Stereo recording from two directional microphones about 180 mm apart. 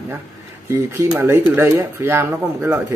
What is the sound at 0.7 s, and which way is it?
Speech, 15° right (ahead or behind).